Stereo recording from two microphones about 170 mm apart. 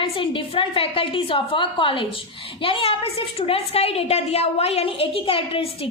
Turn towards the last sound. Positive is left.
turn(degrees=35)  # may be behind; listen again after turning